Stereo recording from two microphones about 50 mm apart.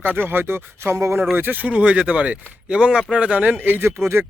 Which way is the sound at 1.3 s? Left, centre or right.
Right.